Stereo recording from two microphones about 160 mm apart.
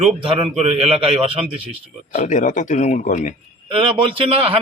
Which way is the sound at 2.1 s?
55° left (ahead or behind).